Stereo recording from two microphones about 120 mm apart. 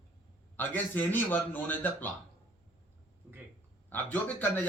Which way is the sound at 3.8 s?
15° left (ahead or behind).